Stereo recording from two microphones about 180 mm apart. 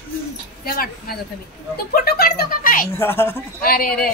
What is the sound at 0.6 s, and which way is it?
Speech, 55° left (ahead or behind).